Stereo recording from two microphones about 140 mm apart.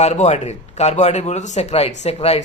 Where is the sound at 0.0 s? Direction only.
55° left (ahead or behind).